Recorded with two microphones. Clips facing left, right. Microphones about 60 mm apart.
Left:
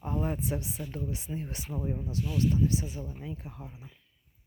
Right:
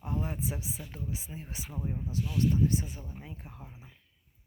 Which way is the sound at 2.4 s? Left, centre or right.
Right.